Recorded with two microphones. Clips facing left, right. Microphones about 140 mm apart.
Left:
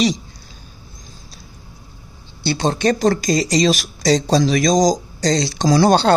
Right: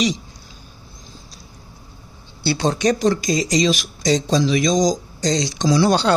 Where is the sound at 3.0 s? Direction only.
35° left (ahead or behind).